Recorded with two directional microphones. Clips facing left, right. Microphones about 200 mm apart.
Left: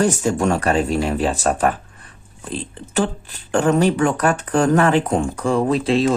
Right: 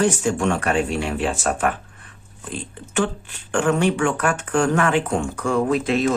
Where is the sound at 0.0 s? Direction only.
40° left (ahead or behind).